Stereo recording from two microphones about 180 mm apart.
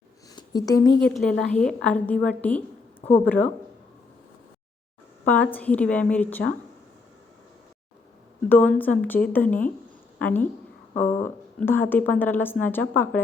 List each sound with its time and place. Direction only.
0.3 s a sound: 20° left (ahead or behind)
1.0 s a woman's voice: 5° left (ahead or behind)
5.2 s speech: 10° left (ahead or behind)
8.4 s speech: 10° left (ahead or behind)
11.6 s speech: 10° left (ahead or behind)